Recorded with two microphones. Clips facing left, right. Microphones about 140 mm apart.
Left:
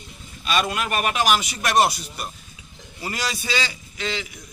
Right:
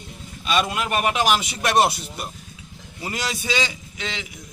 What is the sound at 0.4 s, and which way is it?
A man's voice, 20° right (ahead or behind).